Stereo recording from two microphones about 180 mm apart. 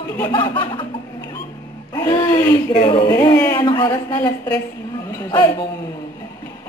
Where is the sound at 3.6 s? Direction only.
25° left (ahead or behind).